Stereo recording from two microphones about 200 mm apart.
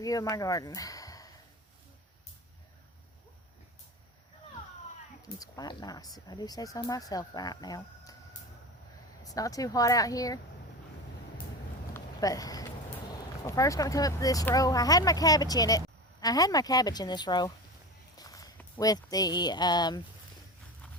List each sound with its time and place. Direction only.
0.0 s speech: 15° left (ahead or behind)
5.2 s speech: 20° left (ahead or behind)
9.2 s speech: 15° left (ahead or behind)
11.9 s a sound: 15° left (ahead or behind)
13.4 s speech: 15° left (ahead or behind)